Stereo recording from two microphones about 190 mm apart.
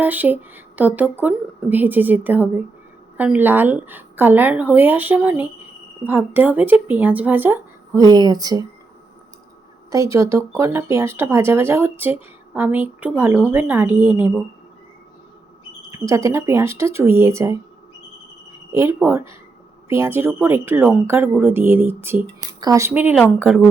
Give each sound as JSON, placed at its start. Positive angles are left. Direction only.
{"t": 0.0, "sound": "speech", "side_deg": -10}
{"t": 9.9, "sound": "speech", "side_deg": -15}
{"t": 15.9, "sound": "speech", "side_deg": -15}
{"t": 18.7, "sound": "speech", "side_deg": -15}